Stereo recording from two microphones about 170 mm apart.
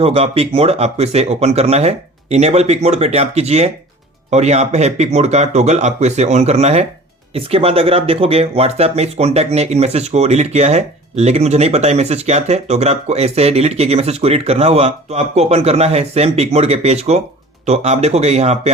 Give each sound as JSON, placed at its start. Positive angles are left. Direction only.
{"t": 0.0, "sound": "speech", "side_deg": -35}